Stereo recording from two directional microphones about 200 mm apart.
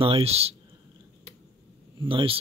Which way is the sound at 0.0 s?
30° right (ahead or behind).